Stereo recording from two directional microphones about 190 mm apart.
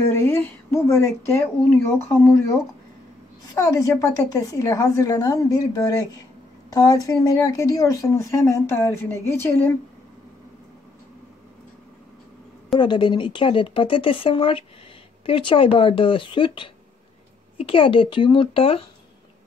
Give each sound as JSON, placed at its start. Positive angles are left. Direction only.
{"t": 0.0, "sound": "speech", "side_deg": 15}
{"t": 3.5, "sound": "a woman's voice", "side_deg": 15}
{"t": 12.7, "sound": "speech", "side_deg": 25}